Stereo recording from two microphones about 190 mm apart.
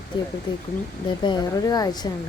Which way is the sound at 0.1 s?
25° left (ahead or behind).